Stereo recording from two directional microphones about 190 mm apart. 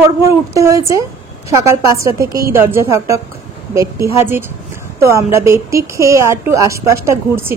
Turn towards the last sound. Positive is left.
turn(degrees=-15)  # may be behind; listen again after turning